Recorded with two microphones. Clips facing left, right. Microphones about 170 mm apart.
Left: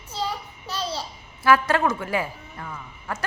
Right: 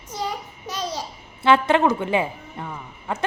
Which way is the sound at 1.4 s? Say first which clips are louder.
Right 3 dB; 25° right (ahead or behind).